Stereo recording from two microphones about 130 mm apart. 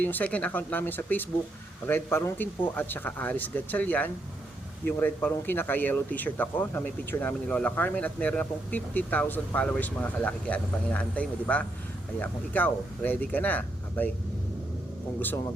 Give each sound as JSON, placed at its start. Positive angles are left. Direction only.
{"t": 0.0, "sound": "speech", "side_deg": 10}